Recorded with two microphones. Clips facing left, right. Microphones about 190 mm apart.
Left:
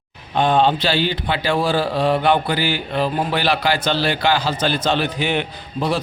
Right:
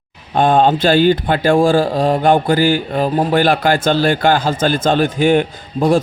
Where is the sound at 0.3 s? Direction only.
50° right (ahead or behind).